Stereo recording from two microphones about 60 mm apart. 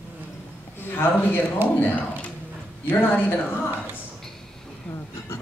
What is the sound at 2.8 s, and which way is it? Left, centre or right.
Speech, left.